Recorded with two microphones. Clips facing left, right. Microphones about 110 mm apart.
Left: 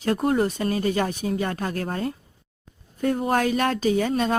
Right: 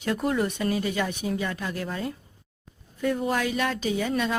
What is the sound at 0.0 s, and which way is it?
A woman's voice, 40° left (ahead or behind).